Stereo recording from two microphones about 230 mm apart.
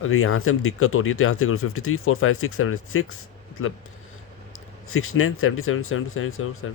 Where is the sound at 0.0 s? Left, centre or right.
Left.